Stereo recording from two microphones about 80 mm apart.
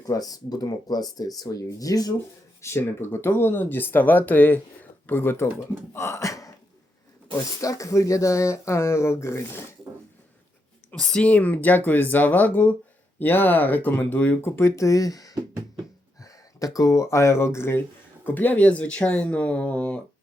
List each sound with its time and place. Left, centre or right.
0.0 s speech: left
2.6 s speech: left
10.9 s speech: centre; by 15.4 s left
15.4 s music: right
16.2 s speech: left
18.3 s speech: left